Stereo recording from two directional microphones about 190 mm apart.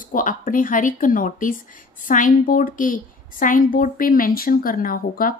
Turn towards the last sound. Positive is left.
turn(degrees=50)  # may be behind; listen again after turning